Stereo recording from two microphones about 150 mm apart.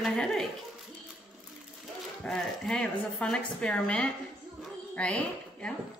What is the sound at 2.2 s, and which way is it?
A woman's voice, 5° left (ahead or behind).